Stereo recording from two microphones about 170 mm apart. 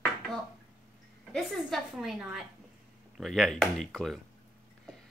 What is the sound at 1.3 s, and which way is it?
Speech, centre (ahead or behind).